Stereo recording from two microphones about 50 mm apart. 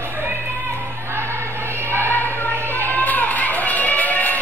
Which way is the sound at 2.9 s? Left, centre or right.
Left.